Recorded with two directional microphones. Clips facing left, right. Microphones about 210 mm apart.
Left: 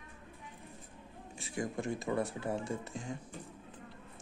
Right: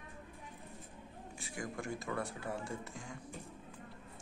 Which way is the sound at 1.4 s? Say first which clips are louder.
Left 6 dB; 20° left (ahead or behind).